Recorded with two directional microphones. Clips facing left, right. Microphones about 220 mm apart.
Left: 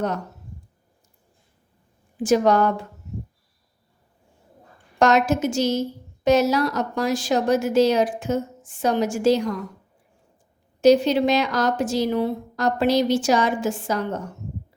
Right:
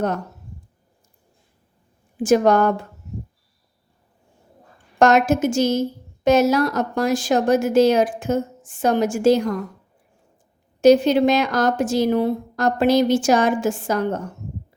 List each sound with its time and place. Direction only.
2.2 s a woman's voice: 50° right (ahead or behind)
4.9 s a woman's voice: 50° right (ahead or behind)
10.8 s a woman's voice: 50° right (ahead or behind)